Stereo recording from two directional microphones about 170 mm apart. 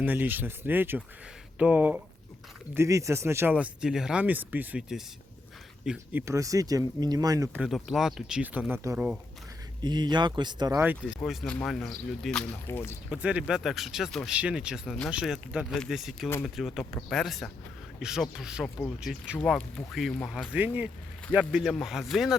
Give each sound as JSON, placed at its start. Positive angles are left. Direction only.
{"t": 0.0, "sound": "speech", "side_deg": -10}
{"t": 6.2, "sound": "speech", "side_deg": -20}
{"t": 7.6, "sound": "speech", "side_deg": 0}
{"t": 9.8, "sound": "speech", "side_deg": -25}
{"t": 11.2, "sound": "speech", "side_deg": 5}
{"t": 12.6, "sound": "speech", "side_deg": 15}
{"t": 13.1, "sound": "speech", "side_deg": -10}
{"t": 19.4, "sound": "speech", "side_deg": 10}